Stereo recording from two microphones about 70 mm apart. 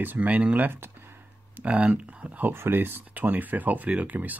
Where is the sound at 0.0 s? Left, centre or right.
Right.